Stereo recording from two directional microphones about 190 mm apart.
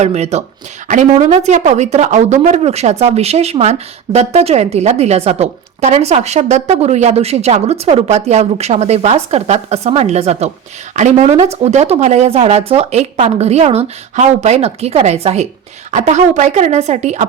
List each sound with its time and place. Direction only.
0.0 s speech: 35° right (ahead or behind)